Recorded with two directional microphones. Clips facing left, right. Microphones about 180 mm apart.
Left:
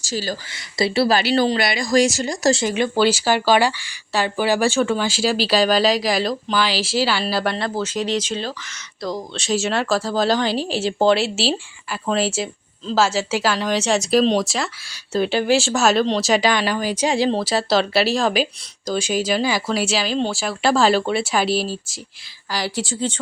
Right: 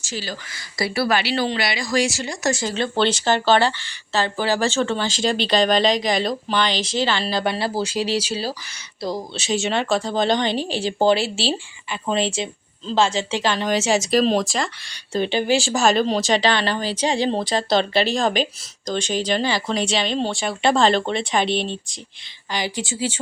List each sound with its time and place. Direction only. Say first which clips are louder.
0.0 s speech: left 5 dB; 40° left (ahead or behind)
0.5 s speech: left 4 dB; 25° left (ahead or behind)
1.2 s speech: left 4 dB; 45° left (ahead or behind)
2.6 s speech: left 3 dB; 15° left (ahead or behind)
7.5 s speech: even; 10° right (ahead or behind)
16.3 s speech: left 1 dB; 10° left (ahead or behind); by 23.2 s 10° right (ahead or behind)